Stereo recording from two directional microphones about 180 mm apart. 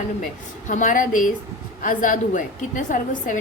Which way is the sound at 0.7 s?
45° left (ahead or behind).